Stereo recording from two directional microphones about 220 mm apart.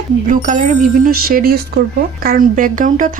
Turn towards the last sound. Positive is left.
turn(degrees=-35)  # may be behind; listen again after turning